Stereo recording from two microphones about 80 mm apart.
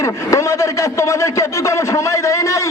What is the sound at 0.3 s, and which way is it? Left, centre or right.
A man's voice, left.